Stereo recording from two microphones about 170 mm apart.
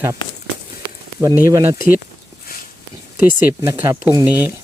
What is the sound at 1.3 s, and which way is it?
Speech, 15° right (ahead or behind).